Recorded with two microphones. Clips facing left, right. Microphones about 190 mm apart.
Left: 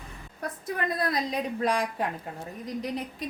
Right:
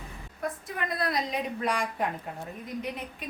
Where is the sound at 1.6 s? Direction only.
30° left (ahead or behind).